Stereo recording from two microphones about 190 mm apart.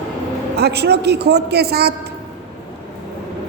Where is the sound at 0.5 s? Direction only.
60° right (ahead or behind).